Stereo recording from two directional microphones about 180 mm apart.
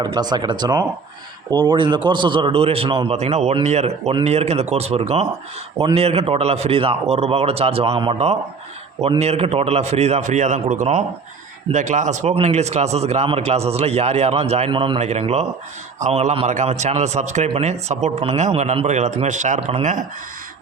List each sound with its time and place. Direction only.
0.0 s a man's voice: 25° right (ahead or behind); by 20.1 s 45° right (ahead or behind)